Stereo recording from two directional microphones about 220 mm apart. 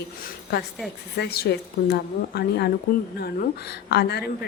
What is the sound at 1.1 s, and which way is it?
A woman's voice, 45° left (ahead or behind).